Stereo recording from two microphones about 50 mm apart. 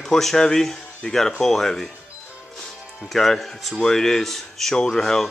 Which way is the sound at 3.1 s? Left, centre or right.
Centre.